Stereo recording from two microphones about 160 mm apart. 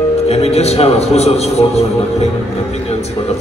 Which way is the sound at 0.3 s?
40° left (ahead or behind).